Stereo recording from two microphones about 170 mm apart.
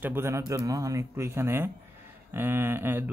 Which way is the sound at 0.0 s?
15° right (ahead or behind).